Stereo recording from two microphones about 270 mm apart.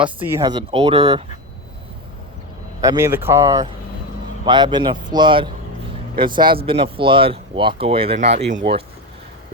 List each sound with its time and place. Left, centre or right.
0.0 s speech: centre
2.8 s speech: centre